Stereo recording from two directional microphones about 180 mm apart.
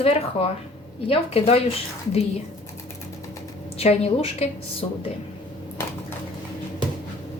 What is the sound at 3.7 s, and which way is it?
A woman's voice, 35° left (ahead or behind).